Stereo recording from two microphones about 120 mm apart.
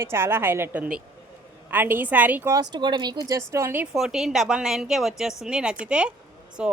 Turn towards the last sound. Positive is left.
turn(degrees=-10)  # may be behind; listen again after turning